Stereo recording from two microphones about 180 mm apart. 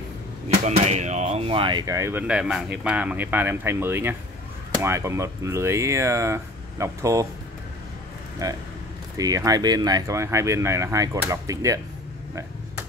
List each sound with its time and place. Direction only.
0.7 s speech: 40° right (ahead or behind); by 7.2 s 15° right (ahead or behind)
8.4 s speech: 20° right (ahead or behind)